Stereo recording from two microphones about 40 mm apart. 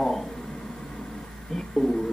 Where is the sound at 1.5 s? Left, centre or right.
Centre.